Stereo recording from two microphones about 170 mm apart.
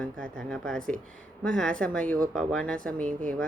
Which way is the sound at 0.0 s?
5° left (ahead or behind).